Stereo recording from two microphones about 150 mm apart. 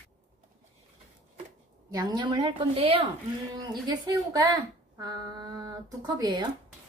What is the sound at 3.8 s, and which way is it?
Speech, 25° right (ahead or behind).